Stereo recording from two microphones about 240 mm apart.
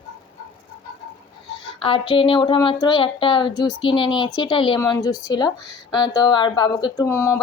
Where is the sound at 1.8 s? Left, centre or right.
Left.